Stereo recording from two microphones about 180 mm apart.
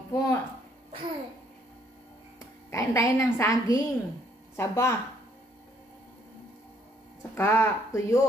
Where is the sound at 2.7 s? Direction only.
15° left (ahead or behind).